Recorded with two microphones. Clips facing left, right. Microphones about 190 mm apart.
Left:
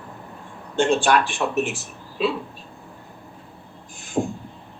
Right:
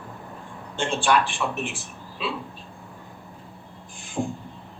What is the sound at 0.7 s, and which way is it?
Speech, 45° left (ahead or behind).